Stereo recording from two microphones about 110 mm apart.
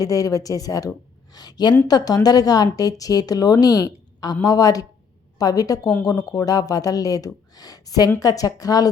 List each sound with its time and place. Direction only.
0.0 s a woman's voice: 30° left (ahead or behind)